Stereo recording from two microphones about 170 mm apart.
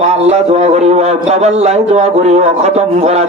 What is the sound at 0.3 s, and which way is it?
A man's voice, 40° right (ahead or behind).